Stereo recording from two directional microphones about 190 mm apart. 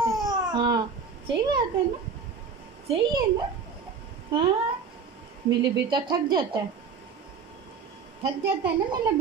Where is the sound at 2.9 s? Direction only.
25° right (ahead or behind).